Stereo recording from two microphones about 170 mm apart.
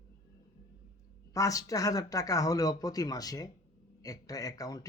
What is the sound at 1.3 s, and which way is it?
Speech, 20° left (ahead or behind).